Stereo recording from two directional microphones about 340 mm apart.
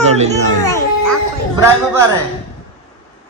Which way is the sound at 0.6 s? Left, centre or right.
Centre.